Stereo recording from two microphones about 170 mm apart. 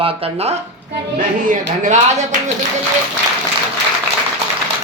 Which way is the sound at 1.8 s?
45° right (ahead or behind).